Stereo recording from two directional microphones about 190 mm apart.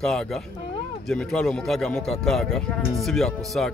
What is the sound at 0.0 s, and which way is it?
Speech, centre (ahead or behind).